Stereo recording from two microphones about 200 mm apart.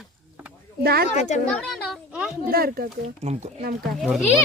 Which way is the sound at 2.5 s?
50° right (ahead or behind).